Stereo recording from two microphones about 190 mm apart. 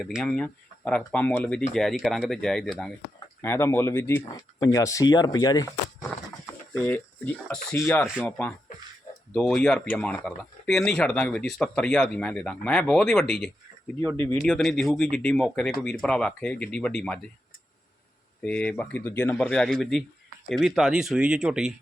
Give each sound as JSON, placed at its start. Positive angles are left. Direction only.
{"t": 0.0, "sound": "speech", "side_deg": 0}
{"t": 3.4, "sound": "speech", "side_deg": 15}
{"t": 6.4, "sound": "speech", "side_deg": 5}
{"t": 8.0, "sound": "speech", "side_deg": -5}
{"t": 14.2, "sound": "speech", "side_deg": 15}
{"t": 14.4, "sound": "speech", "side_deg": 5}
{"t": 18.4, "sound": "speech", "side_deg": 5}